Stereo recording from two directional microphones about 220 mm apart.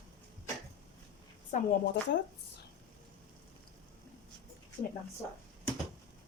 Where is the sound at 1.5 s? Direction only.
35° left (ahead or behind).